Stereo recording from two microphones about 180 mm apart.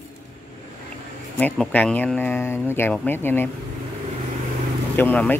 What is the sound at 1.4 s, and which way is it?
Speech, 10° left (ahead or behind).